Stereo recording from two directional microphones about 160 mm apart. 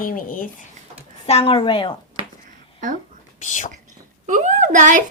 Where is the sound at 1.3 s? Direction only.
35° left (ahead or behind).